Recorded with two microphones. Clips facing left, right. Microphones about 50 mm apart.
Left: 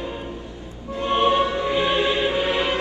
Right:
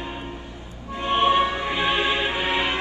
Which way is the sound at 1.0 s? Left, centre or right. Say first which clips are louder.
Even; right.